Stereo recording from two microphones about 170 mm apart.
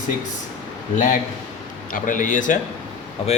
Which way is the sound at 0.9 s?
45° left (ahead or behind).